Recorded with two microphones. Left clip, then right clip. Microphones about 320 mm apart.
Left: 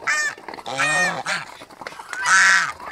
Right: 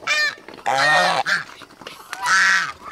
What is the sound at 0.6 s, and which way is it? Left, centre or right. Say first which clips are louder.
Goose: right 4 dB; right.